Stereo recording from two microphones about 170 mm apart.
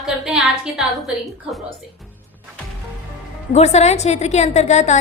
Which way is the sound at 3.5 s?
40° left (ahead or behind).